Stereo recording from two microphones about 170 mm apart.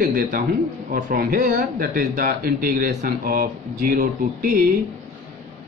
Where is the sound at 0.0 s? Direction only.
55° right (ahead or behind).